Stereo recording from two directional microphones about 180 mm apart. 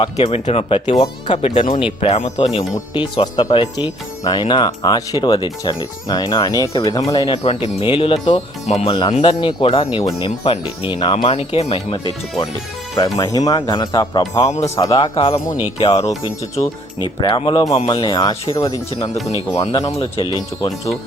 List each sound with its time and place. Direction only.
0.0 s speech: 30° left (ahead or behind)
7.4 s speech: 30° left (ahead or behind)
8.6 s speech: 35° left (ahead or behind)
13.1 s speech: 20° left (ahead or behind); by 16.3 s 35° left (ahead or behind)
16.6 s speech: 25° left (ahead or behind)
19.3 s speech: 35° left (ahead or behind)
20.6 s speech: 20° left (ahead or behind)